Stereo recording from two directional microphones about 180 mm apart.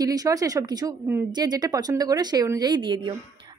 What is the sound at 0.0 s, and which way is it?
Speech, 20° right (ahead or behind).